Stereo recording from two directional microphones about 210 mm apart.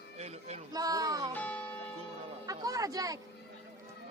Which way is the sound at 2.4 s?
15° right (ahead or behind).